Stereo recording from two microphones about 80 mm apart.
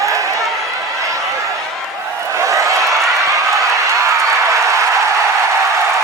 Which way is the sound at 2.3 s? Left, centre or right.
Right.